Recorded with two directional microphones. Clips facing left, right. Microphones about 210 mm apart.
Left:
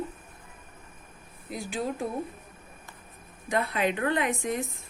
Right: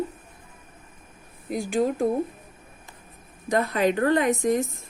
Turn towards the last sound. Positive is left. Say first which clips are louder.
# right 7 dB
turn(degrees=-40)  # may be behind; listen again after turning